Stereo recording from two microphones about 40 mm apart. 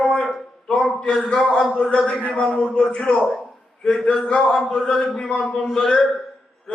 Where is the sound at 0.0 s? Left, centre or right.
Left.